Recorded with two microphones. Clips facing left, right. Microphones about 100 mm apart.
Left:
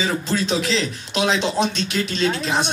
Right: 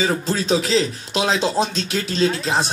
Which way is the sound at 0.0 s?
35° right (ahead or behind).